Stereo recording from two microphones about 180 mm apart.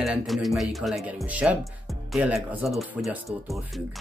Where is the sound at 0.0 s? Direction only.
Centre (ahead or behind).